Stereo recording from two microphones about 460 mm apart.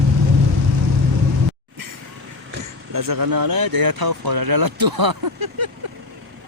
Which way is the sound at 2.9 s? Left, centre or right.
Right.